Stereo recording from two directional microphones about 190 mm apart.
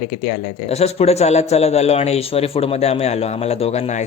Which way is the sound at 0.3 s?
35° left (ahead or behind).